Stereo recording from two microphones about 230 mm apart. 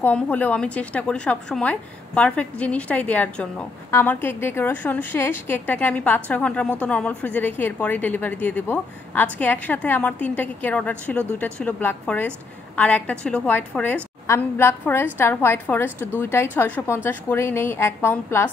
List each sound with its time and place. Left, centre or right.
0.0 s a woman's voice: centre